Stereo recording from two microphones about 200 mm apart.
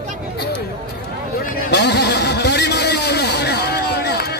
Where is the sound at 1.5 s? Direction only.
55° left (ahead or behind).